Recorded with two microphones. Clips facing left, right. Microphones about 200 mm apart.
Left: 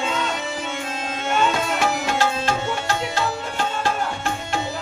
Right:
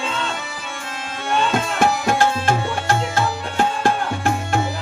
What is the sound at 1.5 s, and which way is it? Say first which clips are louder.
Tabla: right 3 dB; 50° right (ahead or behind).